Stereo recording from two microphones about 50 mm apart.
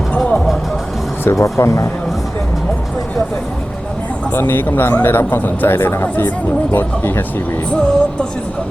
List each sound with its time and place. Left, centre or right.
1.2 s speech: left
4.4 s a man's voice: left
7.7 s music: left